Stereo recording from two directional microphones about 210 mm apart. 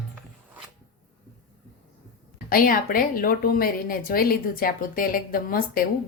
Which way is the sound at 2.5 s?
40° left (ahead or behind).